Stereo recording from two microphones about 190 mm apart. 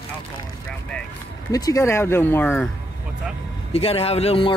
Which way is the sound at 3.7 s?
30° left (ahead or behind).